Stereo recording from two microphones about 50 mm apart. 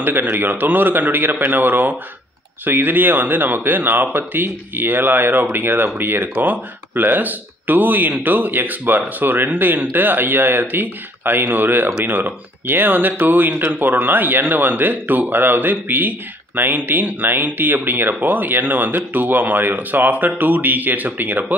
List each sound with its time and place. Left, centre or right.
0.0 s speech: right